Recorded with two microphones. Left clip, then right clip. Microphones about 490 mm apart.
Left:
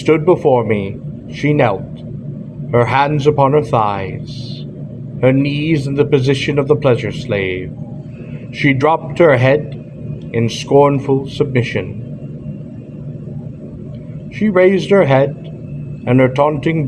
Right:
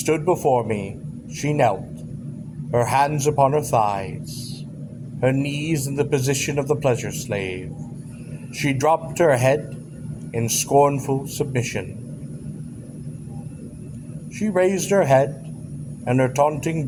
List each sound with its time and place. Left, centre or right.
0.0 s a man's voice: right
2.7 s a man's voice: right
5.4 s a man's voice: centre
5.7 s a man's voice: right
10.3 s a man's voice: right
14.3 s a man's voice: right